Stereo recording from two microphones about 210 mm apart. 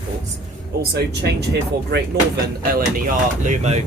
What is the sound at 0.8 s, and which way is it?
Speech, 50° right (ahead or behind).